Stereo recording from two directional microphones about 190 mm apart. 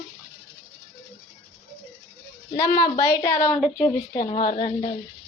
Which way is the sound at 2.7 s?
20° left (ahead or behind).